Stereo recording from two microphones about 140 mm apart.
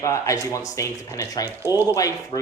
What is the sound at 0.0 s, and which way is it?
Speech, 20° left (ahead or behind).